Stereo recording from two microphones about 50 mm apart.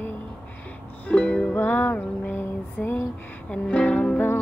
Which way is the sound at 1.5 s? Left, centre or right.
Left.